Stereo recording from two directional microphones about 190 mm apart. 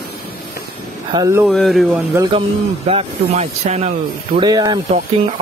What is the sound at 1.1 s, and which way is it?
Speech, 20° right (ahead or behind).